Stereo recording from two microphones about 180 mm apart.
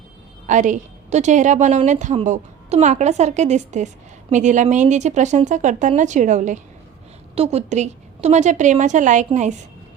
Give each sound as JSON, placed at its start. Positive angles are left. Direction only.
{"t": 0.4, "sound": "a woman's voice", "side_deg": -45}